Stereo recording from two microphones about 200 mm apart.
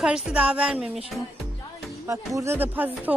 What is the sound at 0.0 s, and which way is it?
Speech, 5° right (ahead or behind).